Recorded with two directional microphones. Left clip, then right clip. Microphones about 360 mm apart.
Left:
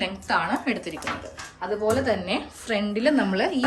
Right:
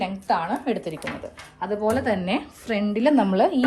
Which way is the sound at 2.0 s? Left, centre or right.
Right.